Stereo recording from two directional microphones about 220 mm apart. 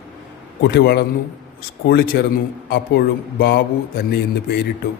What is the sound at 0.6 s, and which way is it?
A man's voice, 45° left (ahead or behind).